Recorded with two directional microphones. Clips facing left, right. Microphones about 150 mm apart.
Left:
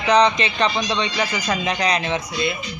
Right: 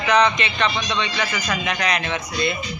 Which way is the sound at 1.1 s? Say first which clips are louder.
Left 2 dB; 20° left (ahead or behind).